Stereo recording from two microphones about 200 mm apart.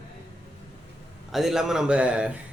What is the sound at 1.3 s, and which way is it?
Speech, centre (ahead or behind).